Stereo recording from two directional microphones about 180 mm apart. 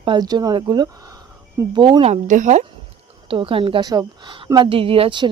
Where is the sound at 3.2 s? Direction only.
30° right (ahead or behind).